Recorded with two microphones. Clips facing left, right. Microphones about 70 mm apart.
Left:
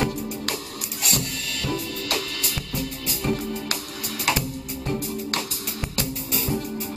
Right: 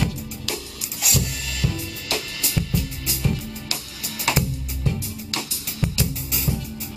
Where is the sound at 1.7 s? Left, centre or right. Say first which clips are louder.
Left 2 dB; left.